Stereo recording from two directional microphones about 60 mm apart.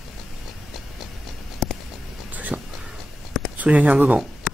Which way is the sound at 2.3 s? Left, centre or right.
Right.